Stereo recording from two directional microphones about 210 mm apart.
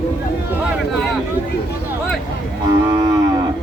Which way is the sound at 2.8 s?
15° right (ahead or behind).